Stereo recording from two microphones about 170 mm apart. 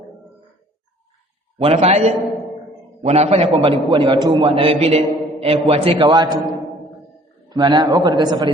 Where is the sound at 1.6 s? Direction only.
35° right (ahead or behind).